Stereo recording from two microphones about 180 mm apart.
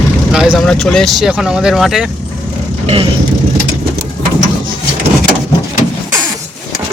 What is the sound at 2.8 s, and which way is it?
Speech, 30° right (ahead or behind).